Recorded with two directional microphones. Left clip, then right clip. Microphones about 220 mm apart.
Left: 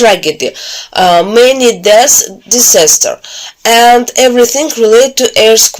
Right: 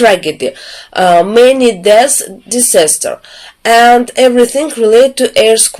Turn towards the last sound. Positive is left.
turn(degrees=15)  # may be behind; listen again after turning